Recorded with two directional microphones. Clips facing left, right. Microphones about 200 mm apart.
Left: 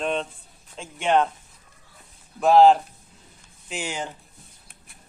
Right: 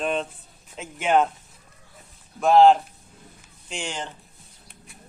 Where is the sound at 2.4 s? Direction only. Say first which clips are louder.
Even; centre (ahead or behind).